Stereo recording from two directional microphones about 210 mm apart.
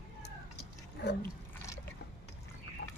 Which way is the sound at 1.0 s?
55° left (ahead or behind).